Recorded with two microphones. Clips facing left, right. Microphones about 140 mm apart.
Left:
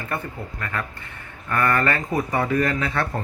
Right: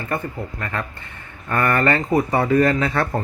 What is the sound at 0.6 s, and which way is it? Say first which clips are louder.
Speech: even; 25° right (ahead or behind).